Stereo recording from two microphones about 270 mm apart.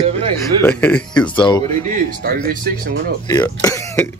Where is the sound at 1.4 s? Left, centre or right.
Centre.